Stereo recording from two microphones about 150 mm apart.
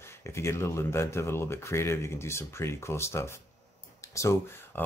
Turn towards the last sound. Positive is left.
turn(degrees=20)  # may be behind; listen again after turning